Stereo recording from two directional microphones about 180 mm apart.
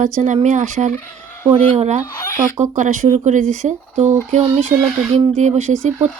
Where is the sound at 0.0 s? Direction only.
45° right (ahead or behind).